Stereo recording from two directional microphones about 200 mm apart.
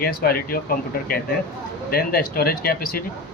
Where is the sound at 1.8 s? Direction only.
50° left (ahead or behind).